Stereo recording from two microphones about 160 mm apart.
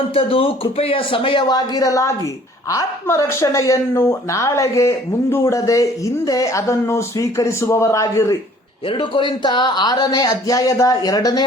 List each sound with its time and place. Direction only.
0.1 s a woman's voice: 35° left (ahead or behind); by 8.4 s 20° left (ahead or behind)
8.9 s a woman's voice: 30° left (ahead or behind)